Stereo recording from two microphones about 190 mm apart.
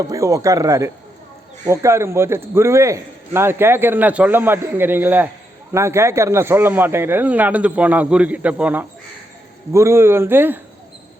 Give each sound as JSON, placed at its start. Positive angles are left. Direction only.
{"t": 0.0, "sound": "a man's voice", "side_deg": -15}